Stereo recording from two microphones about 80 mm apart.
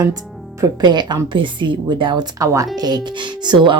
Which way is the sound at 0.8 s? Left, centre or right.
Right.